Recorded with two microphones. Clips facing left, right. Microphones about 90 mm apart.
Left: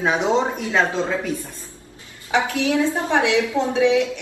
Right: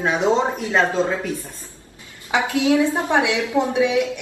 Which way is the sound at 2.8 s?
20° right (ahead or behind).